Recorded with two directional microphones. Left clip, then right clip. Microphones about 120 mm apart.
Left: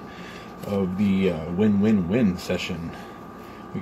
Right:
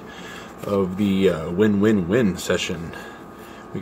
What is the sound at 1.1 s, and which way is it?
Speech, 35° right (ahead or behind).